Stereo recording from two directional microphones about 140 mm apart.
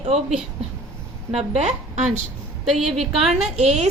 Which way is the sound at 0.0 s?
45° right (ahead or behind).